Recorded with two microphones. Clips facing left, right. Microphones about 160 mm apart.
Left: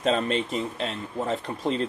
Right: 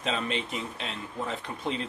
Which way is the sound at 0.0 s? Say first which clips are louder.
Left 7 dB; 40° left (ahead or behind).